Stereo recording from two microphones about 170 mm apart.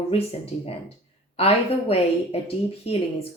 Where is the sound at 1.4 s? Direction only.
35° left (ahead or behind).